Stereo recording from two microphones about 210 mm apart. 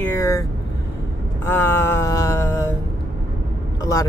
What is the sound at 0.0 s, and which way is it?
Speech, 15° left (ahead or behind).